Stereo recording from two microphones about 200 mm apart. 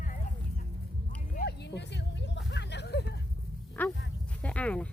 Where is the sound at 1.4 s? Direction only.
60° left (ahead or behind).